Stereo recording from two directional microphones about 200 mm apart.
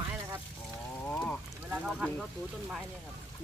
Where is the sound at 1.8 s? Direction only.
Centre (ahead or behind).